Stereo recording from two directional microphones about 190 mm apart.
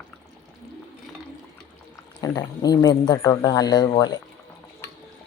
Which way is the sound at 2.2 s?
20° left (ahead or behind).